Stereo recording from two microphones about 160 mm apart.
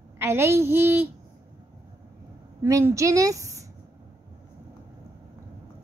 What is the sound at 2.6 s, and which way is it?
A woman's voice, 15° right (ahead or behind).